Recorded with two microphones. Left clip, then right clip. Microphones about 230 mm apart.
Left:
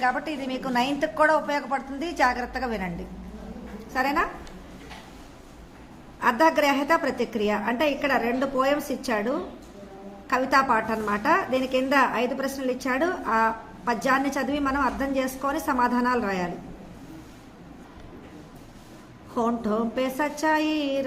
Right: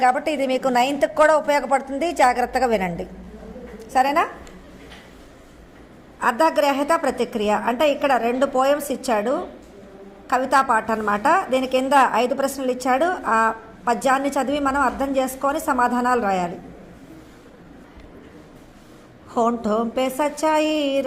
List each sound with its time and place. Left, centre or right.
0.0 s a woman's voice: right
6.2 s a woman's voice: right
19.3 s a woman's voice: right